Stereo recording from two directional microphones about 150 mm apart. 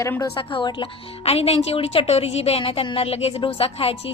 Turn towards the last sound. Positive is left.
turn(degrees=40)  # may be behind; listen again after turning